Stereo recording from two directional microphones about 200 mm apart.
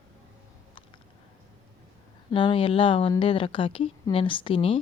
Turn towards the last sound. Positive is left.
turn(degrees=25)  # may be behind; listen again after turning